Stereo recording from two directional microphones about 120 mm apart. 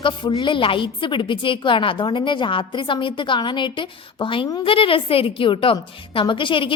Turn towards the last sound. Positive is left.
turn(degrees=45)  # may be behind; listen again after turning